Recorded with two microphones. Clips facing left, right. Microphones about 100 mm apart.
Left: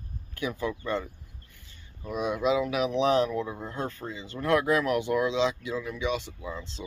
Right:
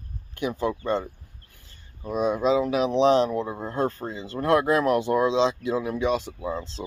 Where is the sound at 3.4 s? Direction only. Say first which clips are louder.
Right 7 dB; 40° right (ahead or behind).